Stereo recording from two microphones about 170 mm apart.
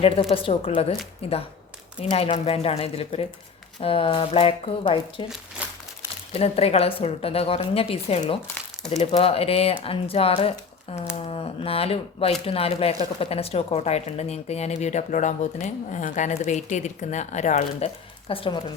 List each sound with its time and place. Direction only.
0.0 s speech: 35° left (ahead or behind)
6.3 s a woman's voice: 35° left (ahead or behind)